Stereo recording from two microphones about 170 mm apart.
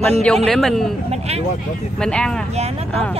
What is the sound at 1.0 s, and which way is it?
Speech, 40° right (ahead or behind).